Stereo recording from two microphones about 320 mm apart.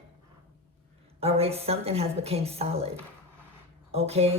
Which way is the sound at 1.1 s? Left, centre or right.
Centre.